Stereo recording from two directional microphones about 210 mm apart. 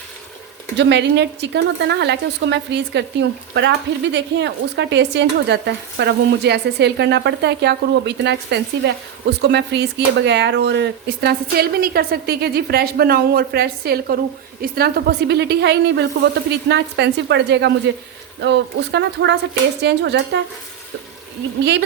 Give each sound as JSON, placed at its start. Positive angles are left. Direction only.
{"t": 0.8, "sound": "a woman's voice", "side_deg": -55}
{"t": 21.6, "sound": "a woman's voice", "side_deg": -55}